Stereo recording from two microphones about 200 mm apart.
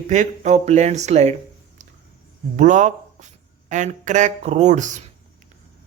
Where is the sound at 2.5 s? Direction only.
35° right (ahead or behind).